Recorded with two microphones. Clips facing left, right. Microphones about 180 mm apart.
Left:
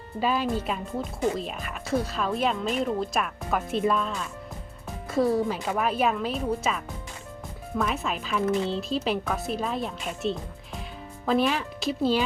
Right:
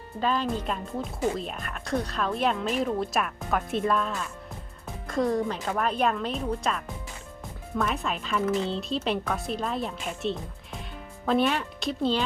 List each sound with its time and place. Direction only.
0.2 s speech: 10° left (ahead or behind)